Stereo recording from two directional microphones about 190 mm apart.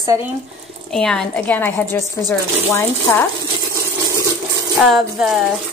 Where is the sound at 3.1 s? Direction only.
10° left (ahead or behind).